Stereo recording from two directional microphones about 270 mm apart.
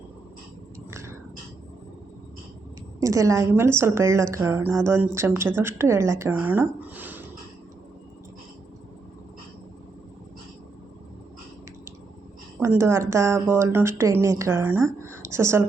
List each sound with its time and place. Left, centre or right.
0.9 s a sound: centre
3.0 s a woman's voice: centre
12.5 s a woman's voice: centre